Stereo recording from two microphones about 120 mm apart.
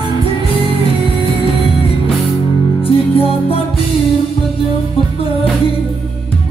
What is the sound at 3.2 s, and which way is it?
Music, 50° left (ahead or behind).